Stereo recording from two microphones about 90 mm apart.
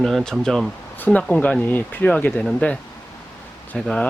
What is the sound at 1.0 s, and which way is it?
Speech, 15° left (ahead or behind).